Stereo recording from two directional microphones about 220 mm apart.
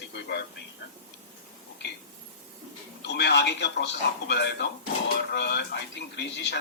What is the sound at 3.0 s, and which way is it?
Speech, 50° left (ahead or behind).